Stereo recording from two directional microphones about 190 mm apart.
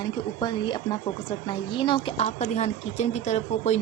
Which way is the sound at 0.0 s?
20° left (ahead or behind).